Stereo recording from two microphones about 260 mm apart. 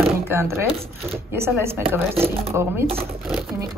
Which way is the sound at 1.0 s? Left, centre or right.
Centre.